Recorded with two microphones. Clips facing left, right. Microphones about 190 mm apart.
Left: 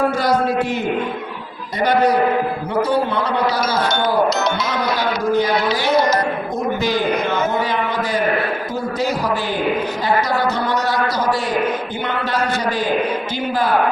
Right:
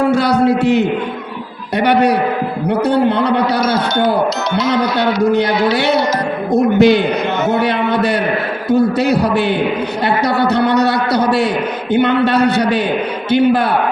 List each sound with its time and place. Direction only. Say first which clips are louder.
0.0 s a man's voice: right 5 dB; 70° right (ahead or behind)
4.9 s a man's voice: right 3 dB; 65° right (ahead or behind)
10.4 s a man's voice: right 7 dB; 65° right (ahead or behind)